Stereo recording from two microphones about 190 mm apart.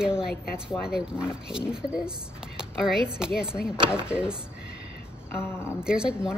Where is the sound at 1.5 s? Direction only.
5° right (ahead or behind).